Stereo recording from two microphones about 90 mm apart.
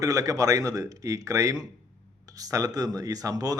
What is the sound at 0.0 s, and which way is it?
Speech, 40° right (ahead or behind).